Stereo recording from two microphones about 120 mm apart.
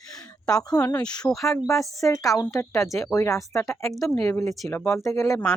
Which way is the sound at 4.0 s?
5° left (ahead or behind).